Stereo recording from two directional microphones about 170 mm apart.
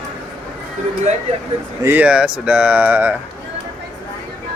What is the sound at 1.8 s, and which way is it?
Speech, 10° right (ahead or behind).